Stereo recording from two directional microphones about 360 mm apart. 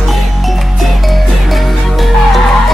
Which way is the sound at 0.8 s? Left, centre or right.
Centre.